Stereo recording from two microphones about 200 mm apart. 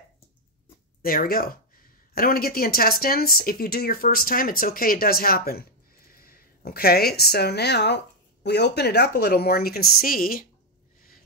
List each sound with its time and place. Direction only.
1.0 s a woman's voice: 45° left (ahead or behind)